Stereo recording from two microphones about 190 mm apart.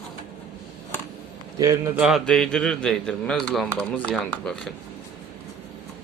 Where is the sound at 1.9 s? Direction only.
5° right (ahead or behind).